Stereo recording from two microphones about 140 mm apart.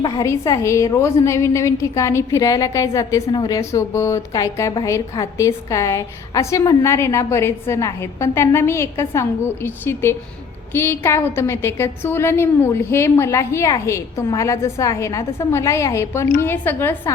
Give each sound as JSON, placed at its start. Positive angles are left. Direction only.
{"t": 0.0, "sound": "a woman's voice", "side_deg": 25}